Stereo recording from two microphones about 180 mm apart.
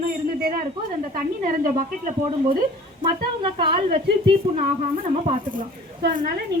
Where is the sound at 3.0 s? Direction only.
30° right (ahead or behind).